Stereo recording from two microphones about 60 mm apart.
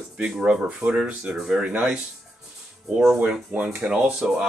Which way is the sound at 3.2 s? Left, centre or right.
Right.